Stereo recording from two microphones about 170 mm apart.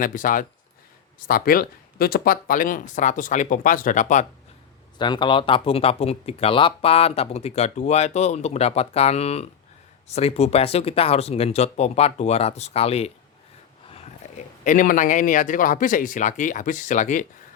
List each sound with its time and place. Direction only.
0.0 s speech: 55° left (ahead or behind)
4.9 s speech: 25° left (ahead or behind); by 17.2 s 45° left (ahead or behind)